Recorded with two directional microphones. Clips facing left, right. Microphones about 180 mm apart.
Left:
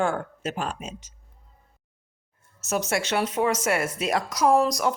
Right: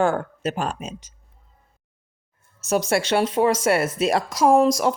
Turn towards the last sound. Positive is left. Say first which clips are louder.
# right 4 dB
turn(degrees=-25)  # may be behind; listen again after turning